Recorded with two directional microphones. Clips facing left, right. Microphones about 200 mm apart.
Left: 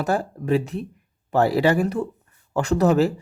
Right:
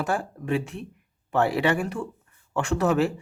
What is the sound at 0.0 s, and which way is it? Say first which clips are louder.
A man's voice: left 4 dB; 40° left (ahead or behind).